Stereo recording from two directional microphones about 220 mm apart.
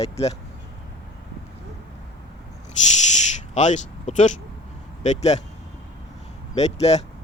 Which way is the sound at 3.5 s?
30° left (ahead or behind).